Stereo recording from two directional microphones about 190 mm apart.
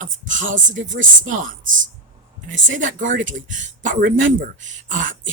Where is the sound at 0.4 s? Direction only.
85° right.